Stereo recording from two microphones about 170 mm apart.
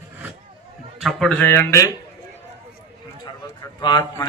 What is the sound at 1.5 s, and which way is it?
Speech, 15° left (ahead or behind).